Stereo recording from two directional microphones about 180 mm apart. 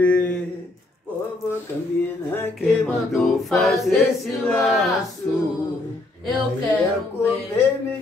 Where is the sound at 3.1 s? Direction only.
Centre (ahead or behind).